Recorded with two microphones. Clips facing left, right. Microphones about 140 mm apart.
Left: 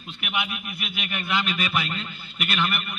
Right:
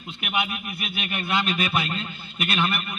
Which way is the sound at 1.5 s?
30° right (ahead or behind).